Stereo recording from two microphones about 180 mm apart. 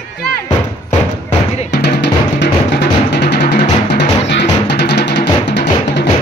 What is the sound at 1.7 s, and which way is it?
Music, 65° left (ahead or behind).